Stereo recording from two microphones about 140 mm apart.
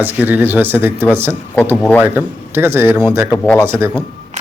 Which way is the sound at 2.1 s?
15° right (ahead or behind).